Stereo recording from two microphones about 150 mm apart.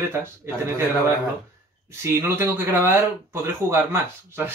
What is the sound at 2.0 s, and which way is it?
Speech, 15° right (ahead or behind).